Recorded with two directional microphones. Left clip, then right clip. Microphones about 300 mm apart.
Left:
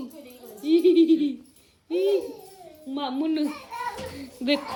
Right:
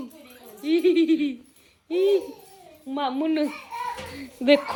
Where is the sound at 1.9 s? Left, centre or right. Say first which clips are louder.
Right 2 dB; centre.